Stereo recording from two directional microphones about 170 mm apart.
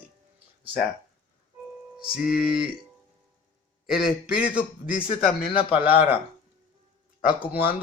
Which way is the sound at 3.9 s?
5° right (ahead or behind).